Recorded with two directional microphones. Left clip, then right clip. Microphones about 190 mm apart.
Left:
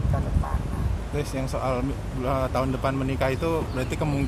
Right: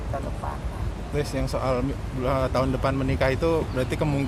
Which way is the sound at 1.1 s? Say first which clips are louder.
Right 2 dB; 15° right (ahead or behind).